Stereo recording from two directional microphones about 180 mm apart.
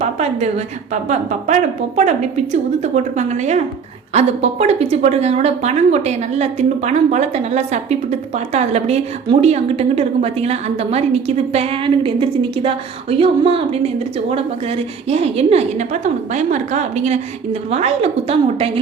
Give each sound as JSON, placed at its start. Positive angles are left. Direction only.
{"t": 0.0, "sound": "a woman's voice", "side_deg": -35}